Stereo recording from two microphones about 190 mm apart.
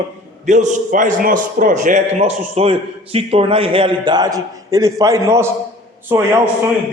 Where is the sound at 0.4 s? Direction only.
40° right (ahead or behind); by 6.5 s 10° right (ahead or behind).